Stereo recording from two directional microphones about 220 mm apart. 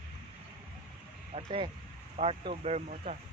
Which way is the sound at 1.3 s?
25° right (ahead or behind).